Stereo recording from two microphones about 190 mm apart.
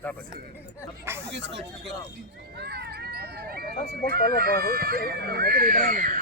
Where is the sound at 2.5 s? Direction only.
55° right (ahead or behind).